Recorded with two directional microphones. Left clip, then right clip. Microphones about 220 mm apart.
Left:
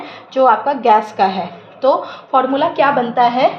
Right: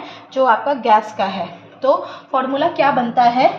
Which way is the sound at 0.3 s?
35° left (ahead or behind).